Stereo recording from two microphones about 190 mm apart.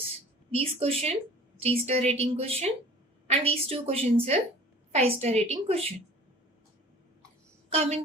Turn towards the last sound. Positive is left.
turn(degrees=-30)  # may be behind; listen again after turning